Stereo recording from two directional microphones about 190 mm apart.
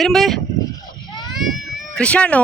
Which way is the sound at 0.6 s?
20° left (ahead or behind).